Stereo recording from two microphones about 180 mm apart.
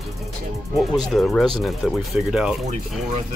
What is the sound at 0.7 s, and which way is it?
Speech, centre (ahead or behind).